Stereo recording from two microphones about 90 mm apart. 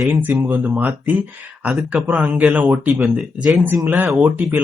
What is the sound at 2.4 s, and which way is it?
Speech, 5° right (ahead or behind).